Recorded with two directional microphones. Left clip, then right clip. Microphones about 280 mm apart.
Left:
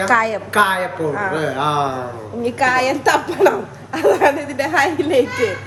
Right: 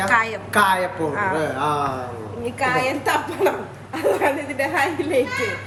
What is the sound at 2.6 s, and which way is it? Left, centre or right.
A woman's voice, left.